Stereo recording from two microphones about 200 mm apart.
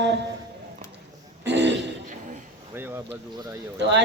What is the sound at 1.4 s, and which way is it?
Throat clearing, 60° right (ahead or behind).